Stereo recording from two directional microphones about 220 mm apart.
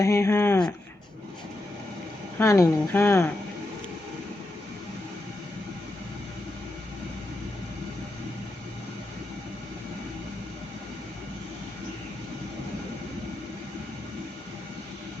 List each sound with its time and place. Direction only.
0.0 s speech: 15° left (ahead or behind)
2.4 s speech: 15° left (ahead or behind)